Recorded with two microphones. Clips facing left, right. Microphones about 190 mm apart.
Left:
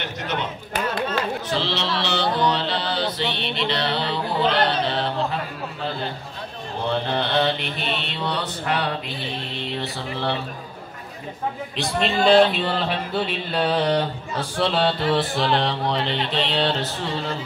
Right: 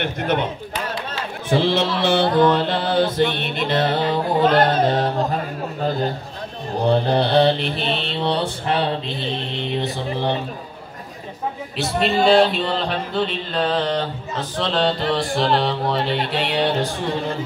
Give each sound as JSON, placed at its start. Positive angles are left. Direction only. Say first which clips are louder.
{"t": 0.0, "sound": "music", "louder": "right 7 dB", "side_deg": -55}
{"t": 1.6, "sound": "music", "louder": "right 6 dB", "side_deg": -50}
{"t": 6.8, "sound": "mantra", "louder": "right 6 dB", "side_deg": -35}
{"t": 11.7, "sound": "music", "louder": "right 4 dB", "side_deg": -5}
{"t": 16.3, "sound": "music", "louder": "right 2 dB", "side_deg": -10}